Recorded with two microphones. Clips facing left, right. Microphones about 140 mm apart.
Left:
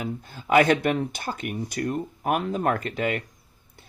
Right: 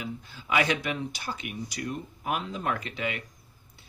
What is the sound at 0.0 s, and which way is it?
Speech, 50° left (ahead or behind).